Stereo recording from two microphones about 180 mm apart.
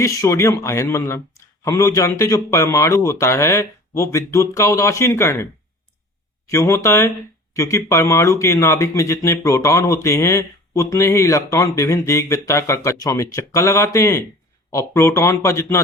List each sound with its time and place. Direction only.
0.0 s speech: 15° left (ahead or behind)
6.5 s speech: 15° left (ahead or behind)